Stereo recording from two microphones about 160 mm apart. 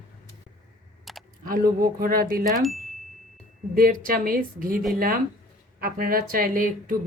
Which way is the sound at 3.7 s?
65° right (ahead or behind).